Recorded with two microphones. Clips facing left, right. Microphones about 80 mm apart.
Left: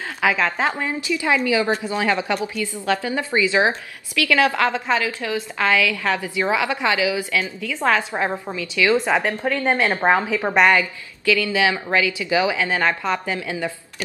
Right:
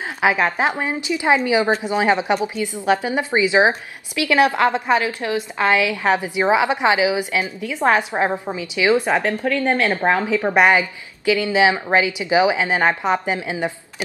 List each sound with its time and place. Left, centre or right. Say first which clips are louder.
0.2 s a woman's voice: right 2 dB; right
9.2 s a woman's voice: right 2 dB; centre
10.5 s a woman's voice: even; centre